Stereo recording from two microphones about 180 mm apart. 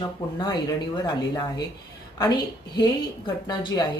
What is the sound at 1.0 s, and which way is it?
Speech, 20° left (ahead or behind).